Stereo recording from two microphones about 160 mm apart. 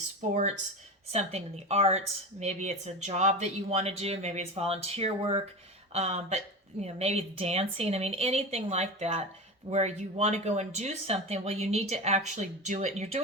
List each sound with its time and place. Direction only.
0.2 s a woman's voice: 45° right (ahead or behind)